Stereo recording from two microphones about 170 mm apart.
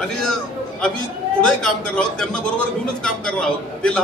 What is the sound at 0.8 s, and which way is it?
A man's voice, 5° left (ahead or behind).